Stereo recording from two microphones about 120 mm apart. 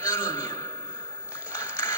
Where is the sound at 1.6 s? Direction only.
20° left (ahead or behind).